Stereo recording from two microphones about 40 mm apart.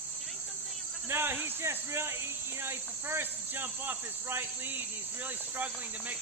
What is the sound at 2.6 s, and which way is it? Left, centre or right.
Cricket, right.